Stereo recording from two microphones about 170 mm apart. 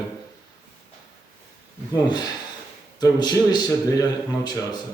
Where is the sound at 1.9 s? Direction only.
25° left (ahead or behind).